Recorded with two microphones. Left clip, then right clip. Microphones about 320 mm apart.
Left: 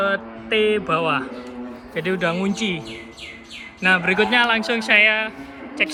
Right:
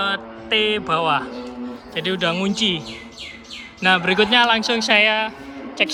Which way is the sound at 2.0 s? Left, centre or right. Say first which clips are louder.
Even; right.